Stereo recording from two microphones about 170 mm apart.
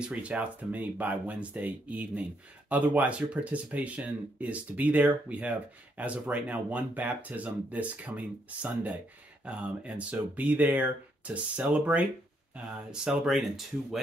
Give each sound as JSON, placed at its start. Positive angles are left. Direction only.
{"t": 0.0, "sound": "speech", "side_deg": -5}